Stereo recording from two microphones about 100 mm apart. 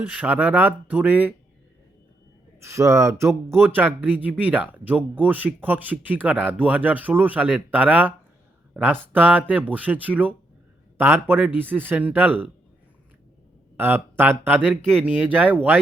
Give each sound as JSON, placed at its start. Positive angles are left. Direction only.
{"t": 0.1, "sound": "speech", "side_deg": -15}
{"t": 2.6, "sound": "a man's voice", "side_deg": -30}
{"t": 13.7, "sound": "a man's voice", "side_deg": -20}
{"t": 15.0, "sound": "speech", "side_deg": -10}